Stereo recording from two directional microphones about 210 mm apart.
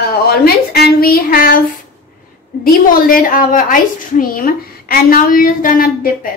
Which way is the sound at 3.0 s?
40° left (ahead or behind).